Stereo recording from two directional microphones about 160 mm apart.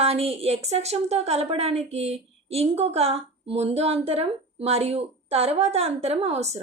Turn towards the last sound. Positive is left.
turn(degrees=-40)  # may be behind; listen again after turning